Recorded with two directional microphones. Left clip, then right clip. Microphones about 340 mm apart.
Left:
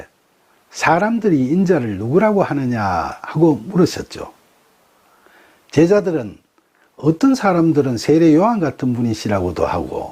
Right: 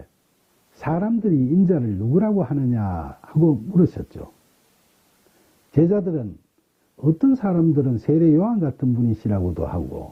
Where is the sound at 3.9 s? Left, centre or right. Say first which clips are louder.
Left 7 dB; centre.